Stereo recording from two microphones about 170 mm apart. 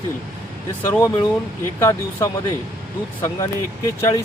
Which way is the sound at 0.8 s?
15° left (ahead or behind).